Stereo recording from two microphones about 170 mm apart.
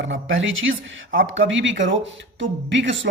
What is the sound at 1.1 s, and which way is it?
Speech, 75° right (ahead or behind).